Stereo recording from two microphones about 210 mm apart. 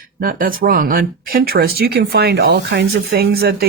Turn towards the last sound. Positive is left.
turn(degrees=-50)  # may be behind; listen again after turning